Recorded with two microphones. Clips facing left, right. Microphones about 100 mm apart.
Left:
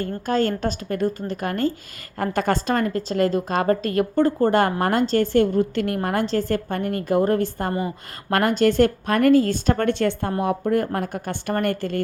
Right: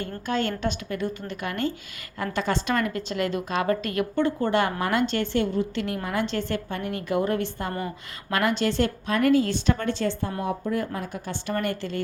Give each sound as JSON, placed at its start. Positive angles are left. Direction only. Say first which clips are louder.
{"t": 0.0, "sound": "a woman's voice", "louder": "left 5 dB", "side_deg": 40}
{"t": 6.2, "sound": "a woman's voice", "louder": "left 5 dB", "side_deg": 40}